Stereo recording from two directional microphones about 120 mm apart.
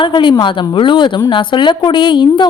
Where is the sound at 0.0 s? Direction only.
40° left (ahead or behind).